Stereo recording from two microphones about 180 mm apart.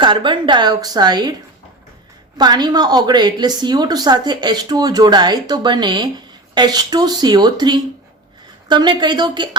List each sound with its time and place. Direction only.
0.0 s a woman's voice: 25° right (ahead or behind)
2.4 s a woman's voice: 25° right (ahead or behind)